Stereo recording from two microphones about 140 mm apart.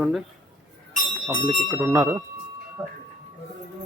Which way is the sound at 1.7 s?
25° right (ahead or behind).